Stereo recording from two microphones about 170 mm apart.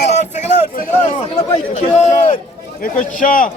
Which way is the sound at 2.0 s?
45° left (ahead or behind).